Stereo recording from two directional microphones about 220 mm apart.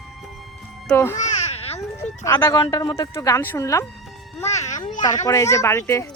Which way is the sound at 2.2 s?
15° left (ahead or behind).